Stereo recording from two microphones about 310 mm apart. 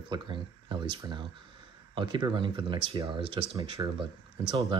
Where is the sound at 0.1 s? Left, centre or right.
Centre.